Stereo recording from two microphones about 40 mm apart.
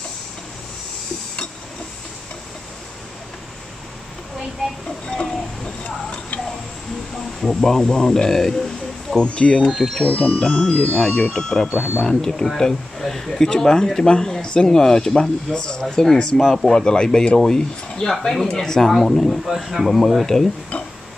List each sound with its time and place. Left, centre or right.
5.0 s train: left
5.9 s tick-tock: left
7.4 s speech: centre
9.8 s speech: centre
10.0 s speech: left
17.4 s speech: centre
20.7 s a sound: left